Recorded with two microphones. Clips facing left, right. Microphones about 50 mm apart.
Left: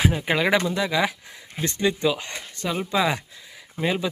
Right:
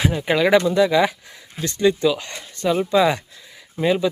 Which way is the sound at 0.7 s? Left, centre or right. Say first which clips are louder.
Right 7 dB; centre.